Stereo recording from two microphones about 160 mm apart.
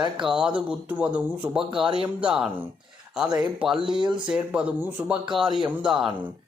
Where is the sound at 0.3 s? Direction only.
5° right (ahead or behind).